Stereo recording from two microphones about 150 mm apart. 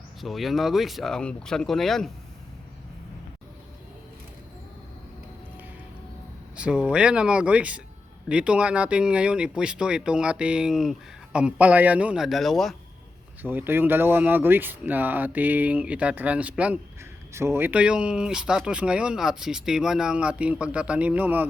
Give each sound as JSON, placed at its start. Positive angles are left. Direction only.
{"t": 0.2, "sound": "speech", "side_deg": 0}
{"t": 6.6, "sound": "speech", "side_deg": -5}
{"t": 13.4, "sound": "speech", "side_deg": -10}